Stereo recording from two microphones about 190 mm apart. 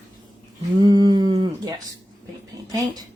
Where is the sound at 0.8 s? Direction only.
20° right (ahead or behind).